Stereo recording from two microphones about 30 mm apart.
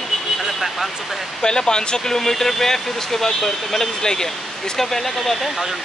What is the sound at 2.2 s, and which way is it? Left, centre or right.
Speech, centre.